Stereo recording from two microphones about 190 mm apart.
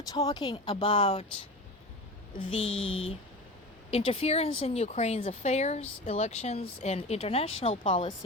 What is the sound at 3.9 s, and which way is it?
Speech, 30° left (ahead or behind).